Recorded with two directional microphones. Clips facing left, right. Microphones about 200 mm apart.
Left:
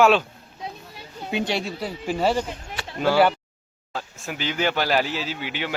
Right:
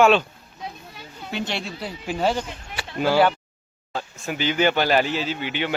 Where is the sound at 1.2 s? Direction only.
10° left (ahead or behind).